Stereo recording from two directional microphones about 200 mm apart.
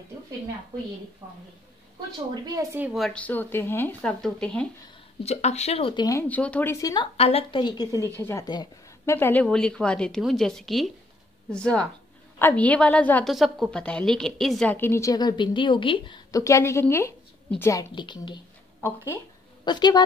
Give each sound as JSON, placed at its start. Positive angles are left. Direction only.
{"t": 1.2, "sound": "a woman's voice", "side_deg": -15}
{"t": 2.4, "sound": "speech", "side_deg": -15}
{"t": 5.2, "sound": "speech", "side_deg": 35}
{"t": 7.2, "sound": "a woman's voice", "side_deg": 30}
{"t": 18.8, "sound": "a woman's voice", "side_deg": 10}